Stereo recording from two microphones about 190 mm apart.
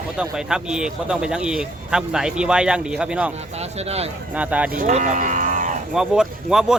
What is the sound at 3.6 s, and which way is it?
Speech, 35° right (ahead or behind).